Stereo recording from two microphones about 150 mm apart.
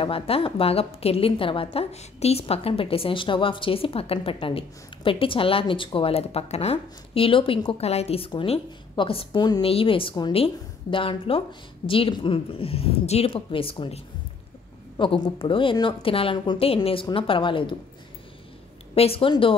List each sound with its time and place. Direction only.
0.0 s a woman's voice: 35° left (ahead or behind)
18.9 s a woman's voice: 40° left (ahead or behind)